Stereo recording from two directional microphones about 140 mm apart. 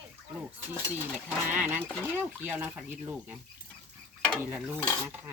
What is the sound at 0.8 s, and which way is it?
Speech, 10° right (ahead or behind).